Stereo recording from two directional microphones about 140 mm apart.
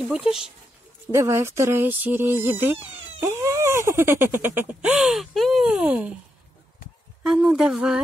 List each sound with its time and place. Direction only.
0.1 s speech: 5° right (ahead or behind)
1.1 s a sound: 20° right (ahead or behind)
7.2 s speech: 5° right (ahead or behind)